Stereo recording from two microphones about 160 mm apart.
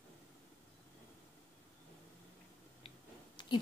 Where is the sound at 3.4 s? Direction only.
30° left (ahead or behind).